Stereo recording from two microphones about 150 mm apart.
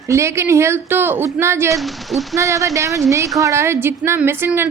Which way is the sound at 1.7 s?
Centre (ahead or behind).